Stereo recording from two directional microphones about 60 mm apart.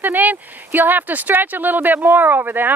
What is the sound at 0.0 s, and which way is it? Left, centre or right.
Speech, right.